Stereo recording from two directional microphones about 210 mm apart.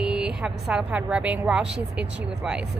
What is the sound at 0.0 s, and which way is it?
A woman's voice, 5° right (ahead or behind).